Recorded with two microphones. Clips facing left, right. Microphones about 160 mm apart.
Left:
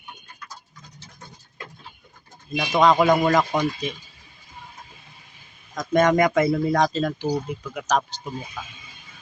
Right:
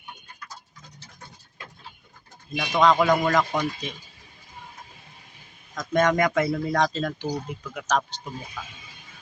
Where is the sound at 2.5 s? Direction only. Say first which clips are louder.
Left 2 dB; 15° left (ahead or behind).